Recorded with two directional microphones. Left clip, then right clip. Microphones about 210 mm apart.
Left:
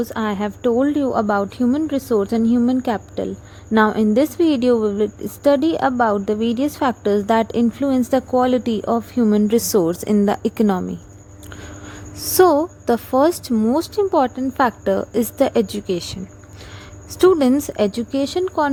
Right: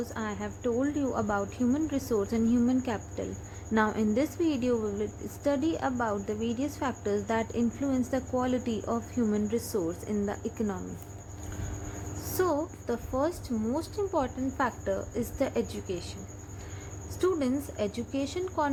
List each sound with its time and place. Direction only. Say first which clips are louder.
0.0 s a woman's voice: left 13 dB; 45° left (ahead or behind)
12.4 s a woman's voice: left 15 dB; 45° left (ahead or behind)
17.2 s a woman's voice: left 14 dB; 50° left (ahead or behind)